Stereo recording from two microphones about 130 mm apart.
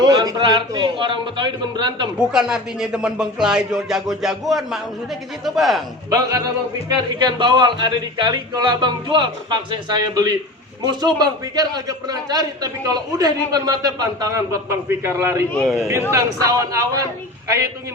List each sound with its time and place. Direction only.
0.0 s a man's voice: 30° right (ahead or behind)
2.1 s speech: 5° right (ahead or behind)
6.1 s a man's voice: 25° right (ahead or behind)
10.8 s a man's voice: 30° right (ahead or behind)
15.5 s speech: centre (ahead or behind)
16.1 s a man's voice: 25° right (ahead or behind)